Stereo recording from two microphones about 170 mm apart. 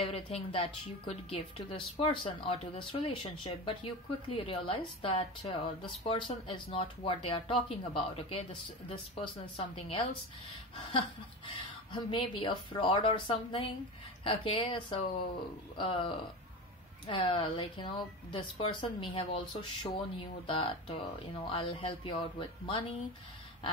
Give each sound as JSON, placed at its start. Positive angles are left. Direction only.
{"t": 0.0, "sound": "a woman's voice", "side_deg": 35}